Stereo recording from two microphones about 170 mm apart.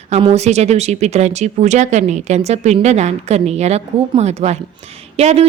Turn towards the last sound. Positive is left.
turn(degrees=-40)  # may be behind; listen again after turning